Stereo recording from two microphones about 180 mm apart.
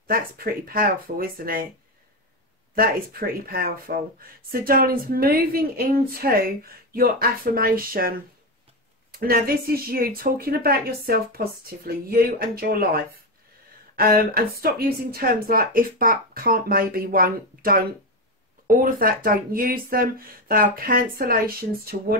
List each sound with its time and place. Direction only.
0.0 s speech: 55° right (ahead or behind)
2.7 s speech: 55° right (ahead or behind)
9.2 s speech: 55° right (ahead or behind)